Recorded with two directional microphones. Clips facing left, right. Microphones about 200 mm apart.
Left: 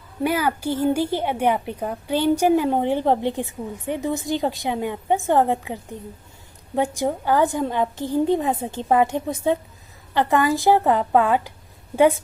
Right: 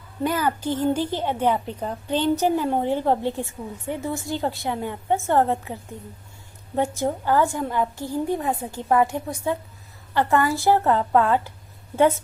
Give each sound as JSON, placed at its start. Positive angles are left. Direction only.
{"t": 0.2, "sound": "a woman's voice", "side_deg": 10}